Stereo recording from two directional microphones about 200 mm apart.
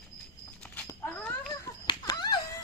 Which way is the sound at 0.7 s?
15° left (ahead or behind).